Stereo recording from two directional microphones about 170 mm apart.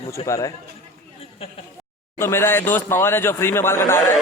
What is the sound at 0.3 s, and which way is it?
Speech, 20° left (ahead or behind).